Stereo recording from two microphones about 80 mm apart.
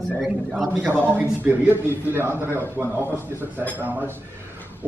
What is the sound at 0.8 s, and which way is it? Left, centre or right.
A man's voice, right.